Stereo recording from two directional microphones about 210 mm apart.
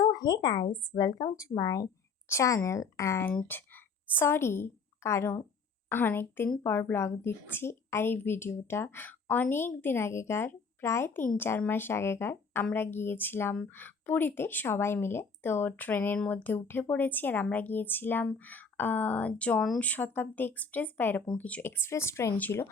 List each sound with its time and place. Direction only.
0.0 s a woman's voice: 20° left (ahead or behind)